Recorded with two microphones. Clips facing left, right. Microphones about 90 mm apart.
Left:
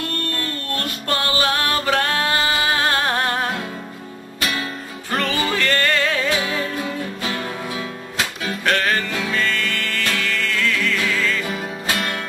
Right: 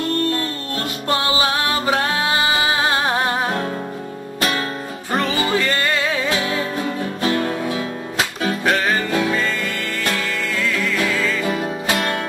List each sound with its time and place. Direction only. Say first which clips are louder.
0.3 s music: right 3 dB; 20° right (ahead or behind)
5.3 s music: right 1 dB; 15° right (ahead or behind)
7.2 s music: right 6 dB; 40° right (ahead or behind)
8.6 s music: even; 5° right (ahead or behind)
11.2 s music: right 3 dB; centre (ahead or behind)